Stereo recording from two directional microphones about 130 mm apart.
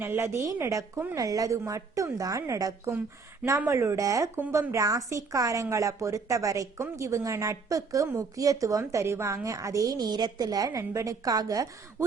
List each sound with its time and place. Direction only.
0.0 s a woman's voice: 15° right (ahead or behind)